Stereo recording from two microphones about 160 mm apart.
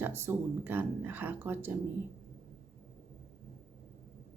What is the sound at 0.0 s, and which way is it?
Speech, 15° right (ahead or behind).